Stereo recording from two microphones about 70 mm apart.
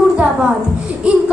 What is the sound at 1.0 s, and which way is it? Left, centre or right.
Laughter, centre.